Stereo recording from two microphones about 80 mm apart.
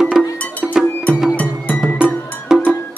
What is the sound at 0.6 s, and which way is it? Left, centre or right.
Cowbell, centre.